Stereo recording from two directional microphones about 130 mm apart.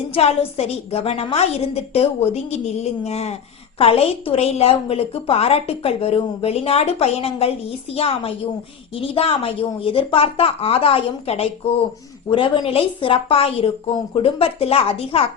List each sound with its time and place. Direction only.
0.1 s a woman's voice: 50° left (ahead or behind)